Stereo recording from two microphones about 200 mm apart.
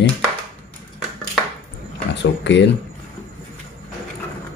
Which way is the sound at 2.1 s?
60° left (ahead or behind).